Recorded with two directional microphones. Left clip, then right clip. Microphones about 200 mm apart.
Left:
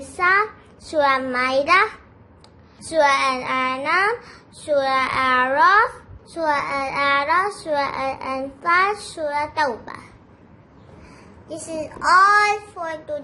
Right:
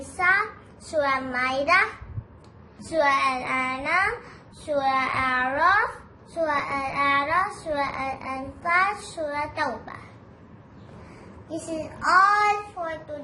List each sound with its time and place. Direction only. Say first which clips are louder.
0.0 s a sound: left 4 dB; 50° left (ahead or behind)
0.9 s a child's voice: left 6 dB; 50° left (ahead or behind)
2.9 s a child's voice: left 4 dB; 60° left (ahead or behind)
11.4 s a child's voice: left 3 dB; 60° left (ahead or behind)